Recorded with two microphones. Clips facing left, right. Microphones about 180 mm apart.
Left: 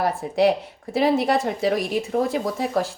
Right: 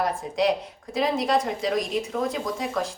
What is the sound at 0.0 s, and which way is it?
Speech, 30° left (ahead or behind).